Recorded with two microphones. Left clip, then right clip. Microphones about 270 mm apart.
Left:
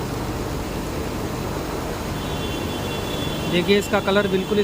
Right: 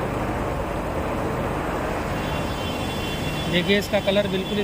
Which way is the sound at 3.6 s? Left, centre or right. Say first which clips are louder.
Left 2 dB; centre.